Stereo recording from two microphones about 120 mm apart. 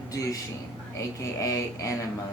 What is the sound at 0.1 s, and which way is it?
A man's voice, 30° left (ahead or behind).